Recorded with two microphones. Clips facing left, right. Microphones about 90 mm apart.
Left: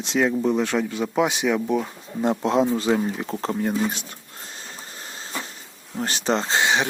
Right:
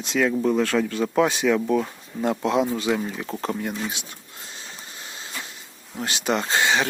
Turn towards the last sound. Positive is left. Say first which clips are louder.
# even
turn(degrees=20)  # may be behind; listen again after turning